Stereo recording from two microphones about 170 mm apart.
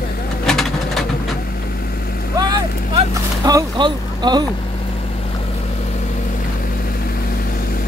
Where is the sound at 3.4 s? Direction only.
25° right (ahead or behind).